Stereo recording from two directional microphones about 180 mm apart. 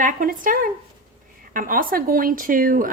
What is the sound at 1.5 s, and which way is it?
Speech, 50° right (ahead or behind).